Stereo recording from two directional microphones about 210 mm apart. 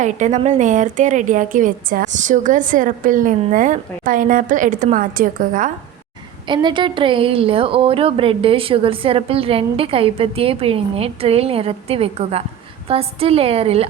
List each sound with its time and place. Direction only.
0.0 s a woman's voice: 35° right (ahead or behind)
6.5 s a woman's voice: 20° right (ahead or behind)